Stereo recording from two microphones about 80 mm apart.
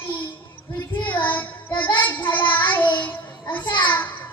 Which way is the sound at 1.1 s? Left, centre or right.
Left.